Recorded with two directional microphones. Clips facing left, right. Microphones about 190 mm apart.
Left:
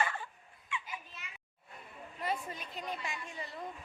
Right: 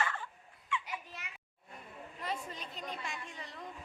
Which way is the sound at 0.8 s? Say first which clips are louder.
Right 3 dB; 70° right (ahead or behind).